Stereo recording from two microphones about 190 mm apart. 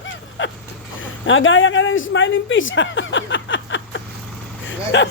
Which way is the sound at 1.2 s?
90° left.